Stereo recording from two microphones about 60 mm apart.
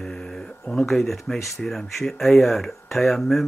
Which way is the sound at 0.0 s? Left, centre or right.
Centre.